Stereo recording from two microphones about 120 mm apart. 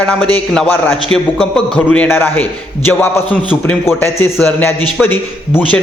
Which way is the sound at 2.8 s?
20° left (ahead or behind).